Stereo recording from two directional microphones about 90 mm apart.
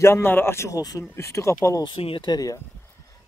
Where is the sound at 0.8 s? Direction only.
45° left (ahead or behind).